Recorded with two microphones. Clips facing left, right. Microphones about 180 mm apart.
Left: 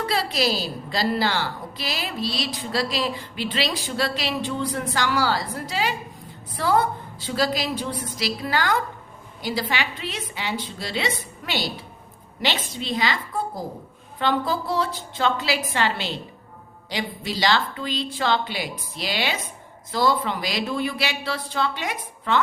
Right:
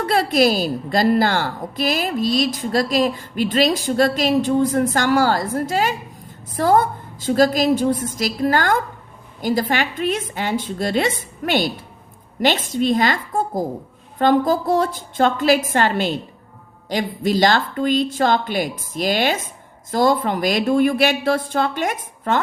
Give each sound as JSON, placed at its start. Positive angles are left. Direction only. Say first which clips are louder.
{"t": 0.0, "sound": "a woman's voice", "louder": "right 7 dB", "side_deg": -50}